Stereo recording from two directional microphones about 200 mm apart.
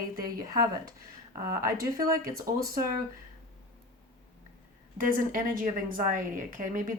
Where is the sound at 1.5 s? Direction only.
45° right (ahead or behind).